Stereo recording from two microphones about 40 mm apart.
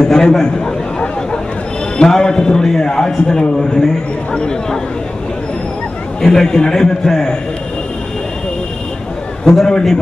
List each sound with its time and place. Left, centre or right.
0.0 s a sound: centre
2.0 s a man's voice: centre
6.2 s a man's voice: centre
9.6 s a man's voice: centre